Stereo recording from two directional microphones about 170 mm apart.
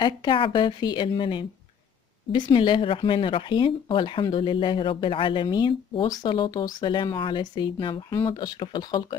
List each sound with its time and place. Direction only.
0.0 s speech: 30° left (ahead or behind)